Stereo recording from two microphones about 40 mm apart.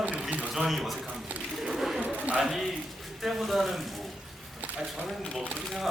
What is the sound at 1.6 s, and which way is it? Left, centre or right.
Bird, centre.